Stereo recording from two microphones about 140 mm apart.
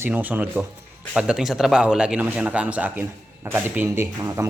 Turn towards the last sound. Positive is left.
turn(degrees=-20)  # may be behind; listen again after turning